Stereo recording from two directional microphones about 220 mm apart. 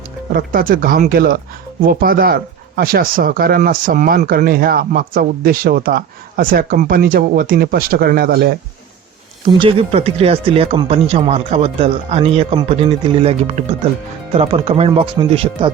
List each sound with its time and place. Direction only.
0.3 s speech: 40° right (ahead or behind)
9.5 s speech: 25° right (ahead or behind)